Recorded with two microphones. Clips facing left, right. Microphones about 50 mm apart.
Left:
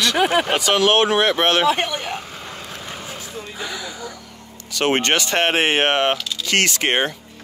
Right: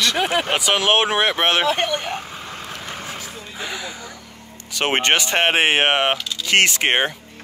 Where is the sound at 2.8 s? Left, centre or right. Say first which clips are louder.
Right 1 dB; right.